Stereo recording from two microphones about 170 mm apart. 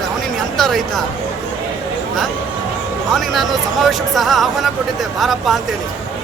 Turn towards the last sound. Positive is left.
turn(degrees=0)  # may be behind; listen again after turning